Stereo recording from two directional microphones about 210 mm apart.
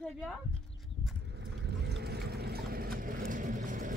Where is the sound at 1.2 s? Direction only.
55° right (ahead or behind).